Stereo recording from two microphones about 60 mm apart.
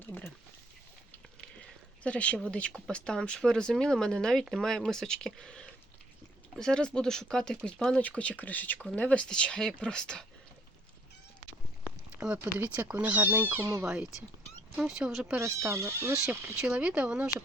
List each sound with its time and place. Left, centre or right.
2.0 s speech: left
12.1 s a sound: centre
12.5 s speech: right
13.6 s speech: right
13.8 s speech: centre
15.4 s speech: right
16.7 s speech: centre